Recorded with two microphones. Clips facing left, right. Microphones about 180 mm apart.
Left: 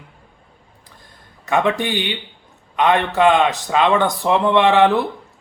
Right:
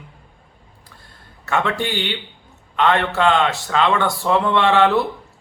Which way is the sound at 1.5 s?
15° left (ahead or behind).